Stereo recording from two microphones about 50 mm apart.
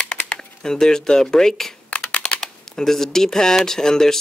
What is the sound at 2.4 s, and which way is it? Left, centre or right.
Speech, centre.